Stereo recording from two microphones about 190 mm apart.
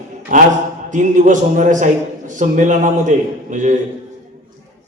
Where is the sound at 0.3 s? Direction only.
45° right (ahead or behind).